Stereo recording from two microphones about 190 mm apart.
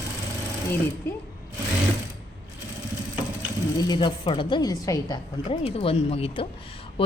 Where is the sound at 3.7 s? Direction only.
20° left (ahead or behind).